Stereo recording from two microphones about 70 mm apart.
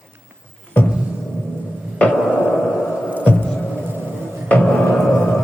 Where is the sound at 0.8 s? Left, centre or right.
Left.